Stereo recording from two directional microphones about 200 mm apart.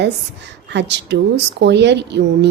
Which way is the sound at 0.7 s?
60° right (ahead or behind).